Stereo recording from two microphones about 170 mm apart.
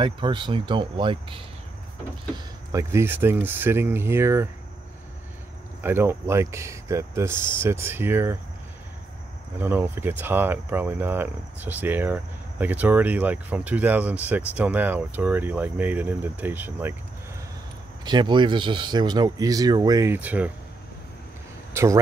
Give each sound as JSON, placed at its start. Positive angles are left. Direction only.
{"t": 0.0, "sound": "speech", "side_deg": -30}
{"t": 2.3, "sound": "speech", "side_deg": -20}
{"t": 5.8, "sound": "speech", "side_deg": -15}
{"t": 9.6, "sound": "speech", "side_deg": -15}
{"t": 18.0, "sound": "speech", "side_deg": -25}
{"t": 21.8, "sound": "speech", "side_deg": -15}